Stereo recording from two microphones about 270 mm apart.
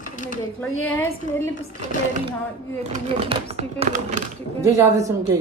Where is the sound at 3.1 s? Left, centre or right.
Right.